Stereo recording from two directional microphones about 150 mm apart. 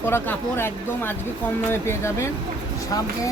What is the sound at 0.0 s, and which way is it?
Speech, 15° left (ahead or behind).